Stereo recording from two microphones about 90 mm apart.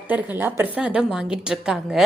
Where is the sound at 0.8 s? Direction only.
10° right (ahead or behind).